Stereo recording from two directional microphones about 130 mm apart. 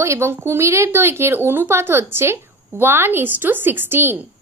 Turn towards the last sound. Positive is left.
turn(degrees=-15)  # may be behind; listen again after turning